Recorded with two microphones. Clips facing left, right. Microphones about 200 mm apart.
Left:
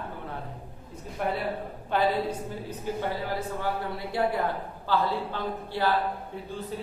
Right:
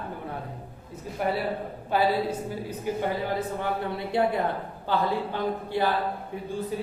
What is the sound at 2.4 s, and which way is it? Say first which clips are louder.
Speech: right 3 dB; 10° right (ahead or behind).